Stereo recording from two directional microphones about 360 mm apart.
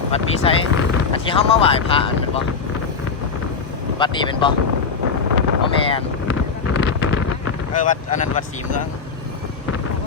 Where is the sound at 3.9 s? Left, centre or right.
Centre.